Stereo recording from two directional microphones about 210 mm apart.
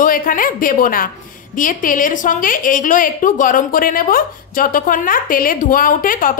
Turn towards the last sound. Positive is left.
turn(degrees=40)  # may be behind; listen again after turning